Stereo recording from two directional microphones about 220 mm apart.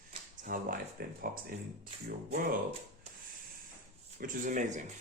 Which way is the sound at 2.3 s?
30° right (ahead or behind).